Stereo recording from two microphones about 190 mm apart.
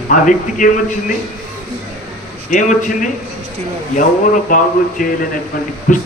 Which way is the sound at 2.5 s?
40° left (ahead or behind).